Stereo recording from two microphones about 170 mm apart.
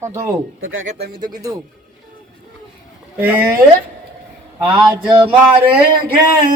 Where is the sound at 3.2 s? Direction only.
10° right (ahead or behind).